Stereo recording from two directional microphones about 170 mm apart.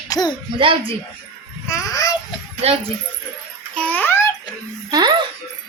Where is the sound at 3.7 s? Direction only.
10° left (ahead or behind).